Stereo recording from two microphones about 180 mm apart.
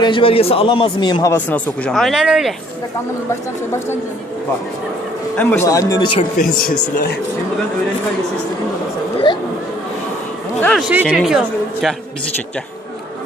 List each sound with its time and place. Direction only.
0.0 s a man's voice: 30° left (ahead or behind); by 2.6 s centre (ahead or behind)
5.4 s a man's voice: 10° left (ahead or behind)
6.3 s speech: 50° left (ahead or behind)
9.3 s speech: 25° left (ahead or behind)
10.6 s a woman's voice: 5° left (ahead or behind)